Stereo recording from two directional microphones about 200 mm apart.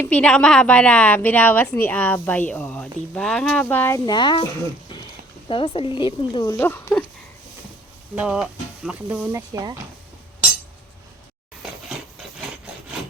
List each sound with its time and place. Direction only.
0.0 s a woman's voice: 5° left (ahead or behind); by 4.4 s 20° left (ahead or behind)
5.5 s speech: 25° left (ahead or behind)
6.4 s a woman's voice: 10° left (ahead or behind)
8.1 s speech: 5° right (ahead or behind)
11.6 s a sound: centre (ahead or behind)